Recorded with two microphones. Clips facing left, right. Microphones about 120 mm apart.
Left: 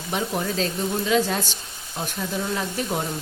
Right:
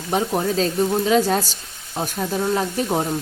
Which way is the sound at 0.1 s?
40° right (ahead or behind).